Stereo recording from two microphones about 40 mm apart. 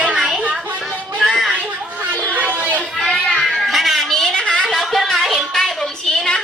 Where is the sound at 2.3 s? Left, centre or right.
Right.